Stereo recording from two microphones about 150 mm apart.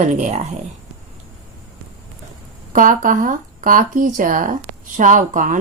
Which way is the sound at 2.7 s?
60° right (ahead or behind).